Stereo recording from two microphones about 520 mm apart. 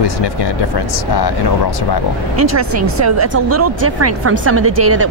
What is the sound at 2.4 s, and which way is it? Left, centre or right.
Speech, right.